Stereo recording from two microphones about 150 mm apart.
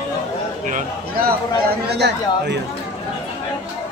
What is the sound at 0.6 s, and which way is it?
Speech, 60° right (ahead or behind).